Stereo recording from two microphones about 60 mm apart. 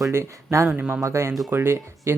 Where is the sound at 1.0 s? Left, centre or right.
Right.